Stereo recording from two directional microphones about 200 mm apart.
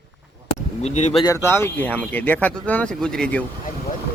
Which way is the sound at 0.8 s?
35° left (ahead or behind).